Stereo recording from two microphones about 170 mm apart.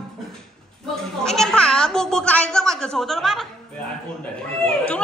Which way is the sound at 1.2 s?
5° left (ahead or behind).